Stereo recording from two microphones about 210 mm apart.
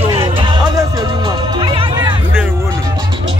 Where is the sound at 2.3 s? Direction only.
10° right (ahead or behind).